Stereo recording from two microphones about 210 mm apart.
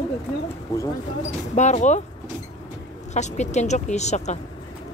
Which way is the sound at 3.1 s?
35° left (ahead or behind).